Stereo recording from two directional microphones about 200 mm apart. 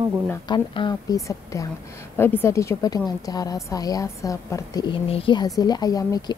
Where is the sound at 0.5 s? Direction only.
20° left (ahead or behind).